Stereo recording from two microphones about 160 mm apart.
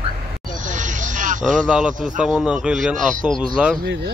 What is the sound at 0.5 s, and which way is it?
Vehicle, 50° right (ahead or behind).